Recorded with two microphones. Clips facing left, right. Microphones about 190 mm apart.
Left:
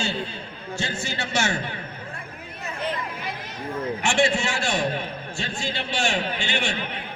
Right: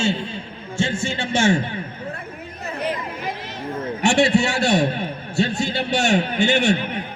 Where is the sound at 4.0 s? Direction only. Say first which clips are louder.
Right 6 dB; 35° right (ahead or behind).